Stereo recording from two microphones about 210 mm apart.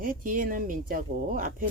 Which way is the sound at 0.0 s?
40° right (ahead or behind).